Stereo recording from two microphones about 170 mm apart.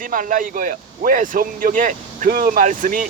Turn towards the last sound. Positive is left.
turn(degrees=-50)  # may be behind; listen again after turning